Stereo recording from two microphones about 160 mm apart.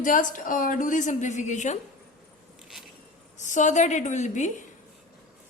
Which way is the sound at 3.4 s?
50° left (ahead or behind).